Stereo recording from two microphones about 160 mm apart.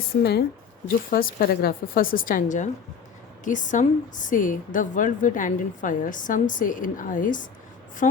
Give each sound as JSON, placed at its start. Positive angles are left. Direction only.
{"t": 0.2, "sound": "speech", "side_deg": 90}
{"t": 1.1, "sound": "a woman's voice", "side_deg": 70}